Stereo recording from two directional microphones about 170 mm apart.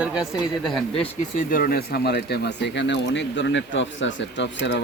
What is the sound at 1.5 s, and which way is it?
Speech, 55° left (ahead or behind).